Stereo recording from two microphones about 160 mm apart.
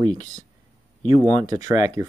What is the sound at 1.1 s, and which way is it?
Speech, 50° left (ahead or behind).